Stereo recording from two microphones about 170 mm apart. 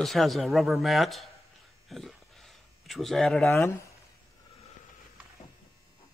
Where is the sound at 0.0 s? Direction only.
Centre (ahead or behind).